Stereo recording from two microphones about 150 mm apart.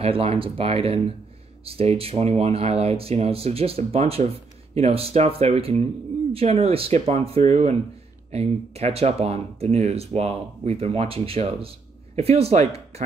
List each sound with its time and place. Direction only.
0.0 s speech: 40° right (ahead or behind)